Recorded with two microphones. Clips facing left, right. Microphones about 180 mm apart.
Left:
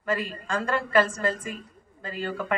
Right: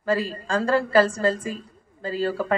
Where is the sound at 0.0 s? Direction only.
30° right (ahead or behind).